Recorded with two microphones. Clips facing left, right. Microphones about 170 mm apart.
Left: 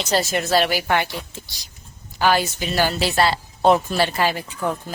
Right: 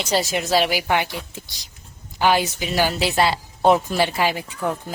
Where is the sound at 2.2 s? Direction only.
15° right (ahead or behind).